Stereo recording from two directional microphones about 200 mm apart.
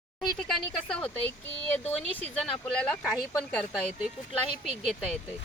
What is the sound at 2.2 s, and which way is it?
A woman's voice, 5° left (ahead or behind).